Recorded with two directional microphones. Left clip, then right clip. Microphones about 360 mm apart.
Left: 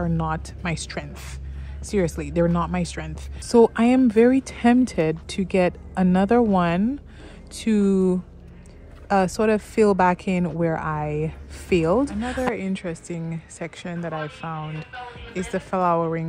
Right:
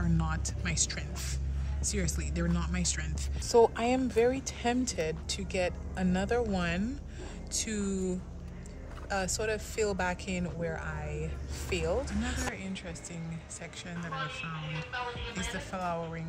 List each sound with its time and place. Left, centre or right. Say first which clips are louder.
0.0 s speech: left 9 dB; centre
3.4 s speech: left 8 dB; centre
9.1 s speech: left 12 dB; centre